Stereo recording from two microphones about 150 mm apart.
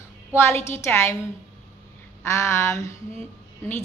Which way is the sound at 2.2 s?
20° left (ahead or behind).